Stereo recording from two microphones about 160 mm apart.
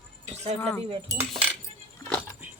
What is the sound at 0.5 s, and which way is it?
Speech, 10° left (ahead or behind).